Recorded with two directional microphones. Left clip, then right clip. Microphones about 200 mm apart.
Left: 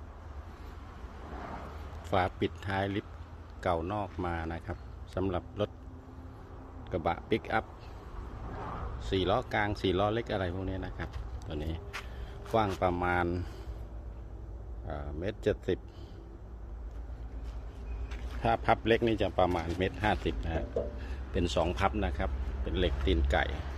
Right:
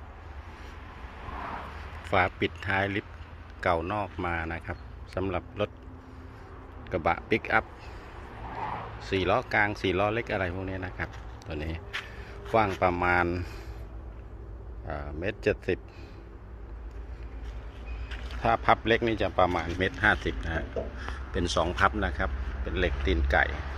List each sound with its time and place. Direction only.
1.3 s vehicle: 55° left (ahead or behind)
2.0 s speech: 15° left (ahead or behind)
6.9 s speech: 5° left (ahead or behind)
8.5 s a sound: 60° left (ahead or behind)
9.0 s speech: 10° left (ahead or behind)
14.9 s speech: 5° left (ahead or behind)
18.4 s speech: 20° left (ahead or behind)